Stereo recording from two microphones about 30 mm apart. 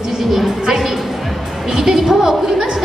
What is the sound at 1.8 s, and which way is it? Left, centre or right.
Speech, centre.